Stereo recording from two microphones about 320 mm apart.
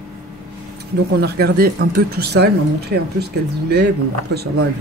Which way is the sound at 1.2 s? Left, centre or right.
Right.